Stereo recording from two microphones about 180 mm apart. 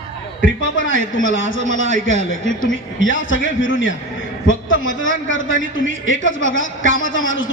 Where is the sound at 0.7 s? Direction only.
90° left.